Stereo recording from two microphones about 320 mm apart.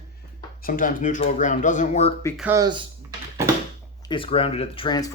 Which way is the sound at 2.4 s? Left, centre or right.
Centre.